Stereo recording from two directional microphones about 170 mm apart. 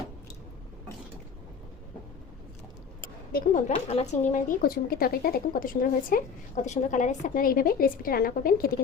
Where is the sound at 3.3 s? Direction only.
55° left (ahead or behind).